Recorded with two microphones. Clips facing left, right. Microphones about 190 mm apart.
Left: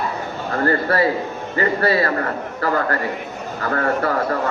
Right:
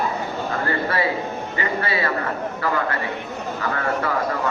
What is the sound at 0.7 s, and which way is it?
A man's voice, 40° left (ahead or behind).